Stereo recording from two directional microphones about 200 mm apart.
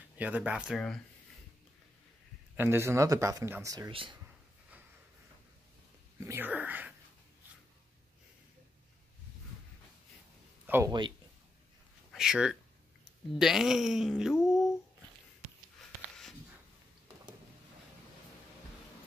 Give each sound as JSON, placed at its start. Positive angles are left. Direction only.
{"t": 0.2, "sound": "speech", "side_deg": -5}
{"t": 2.5, "sound": "speech", "side_deg": -10}
{"t": 6.1, "sound": "speech", "side_deg": -15}
{"t": 10.7, "sound": "speech", "side_deg": -15}
{"t": 12.1, "sound": "speech", "side_deg": -5}
{"t": 14.5, "sound": "a sound", "side_deg": 0}
{"t": 16.0, "sound": "a sound", "side_deg": 0}